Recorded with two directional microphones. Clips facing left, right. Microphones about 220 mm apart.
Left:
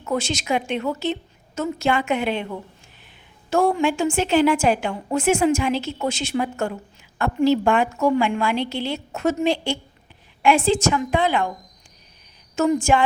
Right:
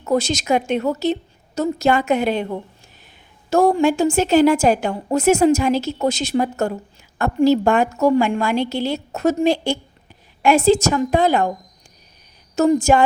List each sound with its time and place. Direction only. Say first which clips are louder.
0.0 s a woman's voice: right 5 dB; 40° right (ahead or behind)
12.5 s a woman's voice: right 4 dB; 40° right (ahead or behind)